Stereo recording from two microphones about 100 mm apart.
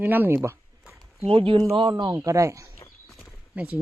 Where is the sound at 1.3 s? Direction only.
65° right (ahead or behind).